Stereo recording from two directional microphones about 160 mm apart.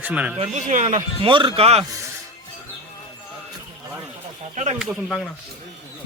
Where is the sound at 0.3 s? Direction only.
45° right (ahead or behind).